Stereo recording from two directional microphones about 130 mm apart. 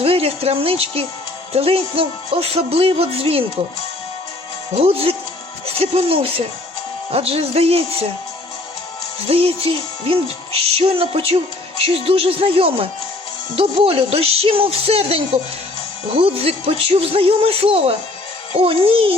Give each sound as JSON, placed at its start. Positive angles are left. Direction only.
{"t": 0.0, "sound": "music", "side_deg": -50}
{"t": 4.8, "sound": "music", "side_deg": -45}
{"t": 5.6, "sound": "speech", "side_deg": -50}
{"t": 7.1, "sound": "music", "side_deg": -50}
{"t": 9.2, "sound": "music", "side_deg": -50}